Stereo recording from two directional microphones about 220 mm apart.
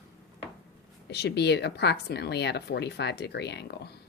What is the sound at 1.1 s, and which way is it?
Speech, 50° left (ahead or behind).